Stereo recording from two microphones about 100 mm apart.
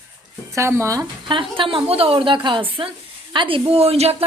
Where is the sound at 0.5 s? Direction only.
30° right (ahead or behind).